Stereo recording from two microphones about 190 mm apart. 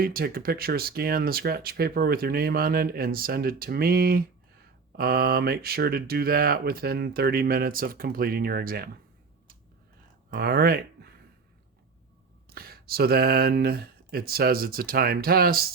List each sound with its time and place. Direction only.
0.0 s speech: 50° right (ahead or behind)
10.3 s speech: 55° right (ahead or behind)
12.5 s speech: 50° right (ahead or behind)